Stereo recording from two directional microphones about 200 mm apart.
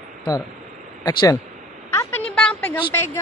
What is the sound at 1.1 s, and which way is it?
Speech, 20° left (ahead or behind).